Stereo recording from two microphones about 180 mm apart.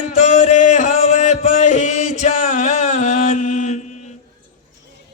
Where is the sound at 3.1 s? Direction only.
45° left (ahead or behind).